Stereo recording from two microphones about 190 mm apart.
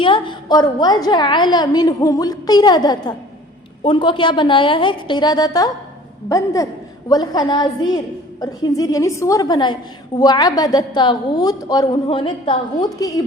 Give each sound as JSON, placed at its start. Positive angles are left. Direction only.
{"t": 0.0, "sound": "a woman's voice", "side_deg": 25}